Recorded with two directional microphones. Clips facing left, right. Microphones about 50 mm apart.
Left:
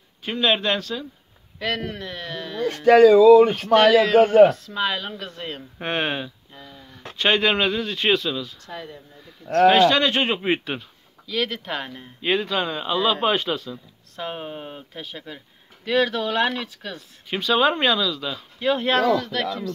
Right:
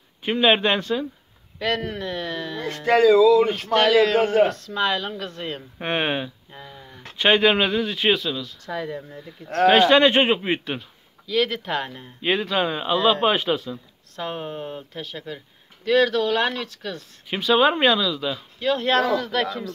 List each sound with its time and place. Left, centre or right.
0.2 s speech: right
1.6 s speech: centre
9.7 s speech: right
10.4 s speech: centre
14.1 s speech: centre
17.3 s speech: centre
18.6 s speech: centre